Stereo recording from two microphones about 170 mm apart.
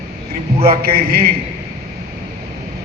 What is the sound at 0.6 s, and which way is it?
Speech, 60° right (ahead or behind).